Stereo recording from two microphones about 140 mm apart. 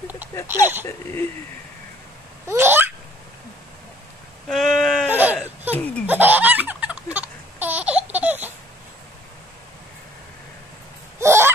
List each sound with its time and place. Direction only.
0.5 s speech: 15° right (ahead or behind)
2.4 s laughter: 15° right (ahead or behind)
4.5 s sheep: centre (ahead or behind)
5.1 s baby cry: 15° right (ahead or behind)
5.8 s laughter: 10° left (ahead or behind)
6.0 s laughter: 10° right (ahead or behind)
11.1 s hiccup: 20° right (ahead or behind)